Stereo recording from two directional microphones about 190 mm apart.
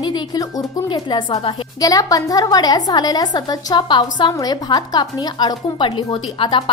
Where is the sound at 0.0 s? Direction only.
20° left (ahead or behind).